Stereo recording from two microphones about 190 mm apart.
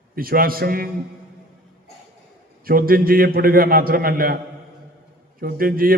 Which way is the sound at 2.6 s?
50° right (ahead or behind).